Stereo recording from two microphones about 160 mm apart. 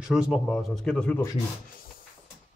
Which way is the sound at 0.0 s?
5° right (ahead or behind).